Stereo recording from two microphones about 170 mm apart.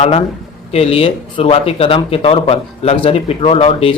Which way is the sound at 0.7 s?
35° left (ahead or behind).